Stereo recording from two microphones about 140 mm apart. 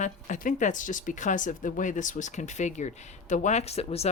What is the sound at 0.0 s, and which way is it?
Speech, 65° left (ahead or behind).